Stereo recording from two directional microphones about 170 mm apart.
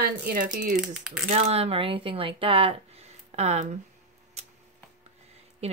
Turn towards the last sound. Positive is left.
turn(degrees=-40)  # may be behind; listen again after turning